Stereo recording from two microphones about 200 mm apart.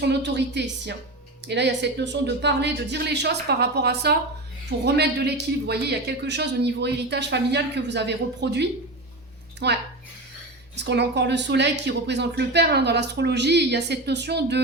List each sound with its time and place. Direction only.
0.1 s a woman's voice: 60° right (ahead or behind)